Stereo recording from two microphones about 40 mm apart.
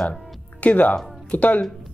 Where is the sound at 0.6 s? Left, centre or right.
Left.